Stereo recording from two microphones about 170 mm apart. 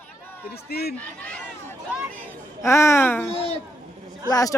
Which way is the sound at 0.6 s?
65° left (ahead or behind).